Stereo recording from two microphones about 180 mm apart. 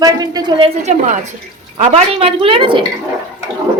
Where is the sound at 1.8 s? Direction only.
35° right (ahead or behind).